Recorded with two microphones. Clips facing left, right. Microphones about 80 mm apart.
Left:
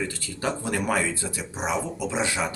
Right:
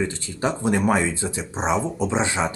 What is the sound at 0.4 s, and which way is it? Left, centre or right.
Speech, right.